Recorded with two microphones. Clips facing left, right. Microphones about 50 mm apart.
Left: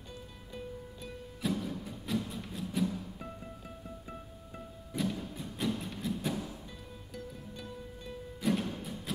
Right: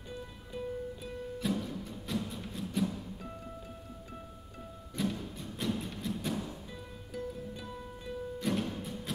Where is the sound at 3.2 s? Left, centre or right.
Centre.